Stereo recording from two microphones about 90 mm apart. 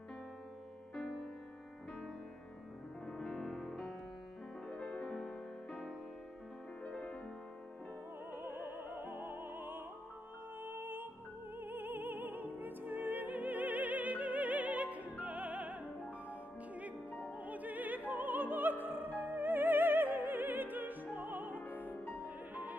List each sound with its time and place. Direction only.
3.1 s music: 5° left (ahead or behind)
8.3 s opera: 25° right (ahead or behind)
10.6 s music: 25° right (ahead or behind)
17.3 s music: 15° right (ahead or behind)
21.9 s music: 25° left (ahead or behind)
22.2 s music: 20° right (ahead or behind)